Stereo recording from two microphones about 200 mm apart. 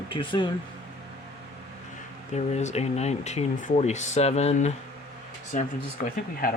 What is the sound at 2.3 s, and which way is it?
Speech, 35° left (ahead or behind).